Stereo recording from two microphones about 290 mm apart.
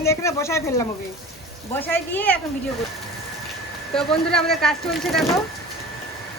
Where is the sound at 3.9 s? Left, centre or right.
Centre.